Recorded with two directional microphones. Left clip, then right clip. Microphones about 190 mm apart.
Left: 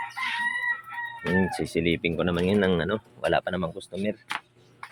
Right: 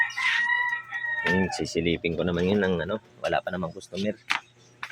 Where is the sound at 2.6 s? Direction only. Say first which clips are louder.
Left 2 dB; 15° left (ahead or behind).